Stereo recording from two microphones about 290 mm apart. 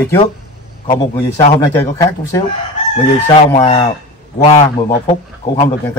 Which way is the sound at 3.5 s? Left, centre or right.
Left.